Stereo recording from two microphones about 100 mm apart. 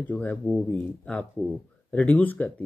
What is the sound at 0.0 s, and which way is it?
Speech, 15° left (ahead or behind).